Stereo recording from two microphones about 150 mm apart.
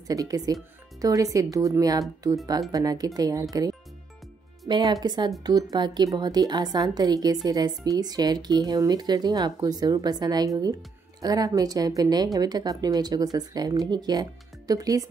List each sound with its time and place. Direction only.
0.0 s speech: 25° right (ahead or behind)